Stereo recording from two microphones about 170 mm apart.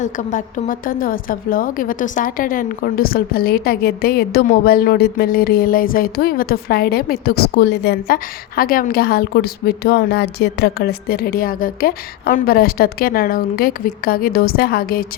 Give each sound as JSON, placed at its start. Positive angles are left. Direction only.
{"t": 0.0, "sound": "a woman's voice", "side_deg": 45}